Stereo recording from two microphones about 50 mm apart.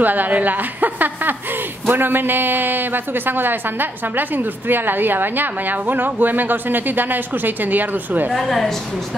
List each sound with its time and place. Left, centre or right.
0.0 s a man's voice: right
8.3 s a woman's voice: centre